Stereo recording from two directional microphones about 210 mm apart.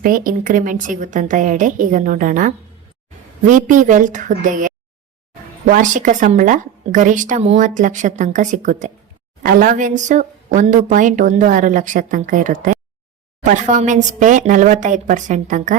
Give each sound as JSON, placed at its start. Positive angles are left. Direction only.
{"t": 0.0, "sound": "speech", "side_deg": -40}